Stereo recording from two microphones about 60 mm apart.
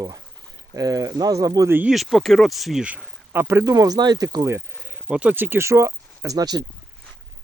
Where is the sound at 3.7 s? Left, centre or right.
Right.